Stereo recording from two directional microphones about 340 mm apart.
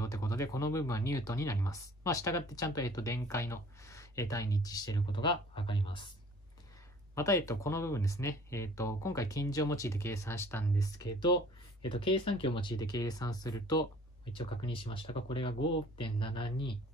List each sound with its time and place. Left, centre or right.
0.0 s speech: centre
7.2 s speech: centre